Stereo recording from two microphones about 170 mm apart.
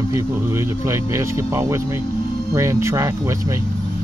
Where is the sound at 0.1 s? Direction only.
15° right (ahead or behind).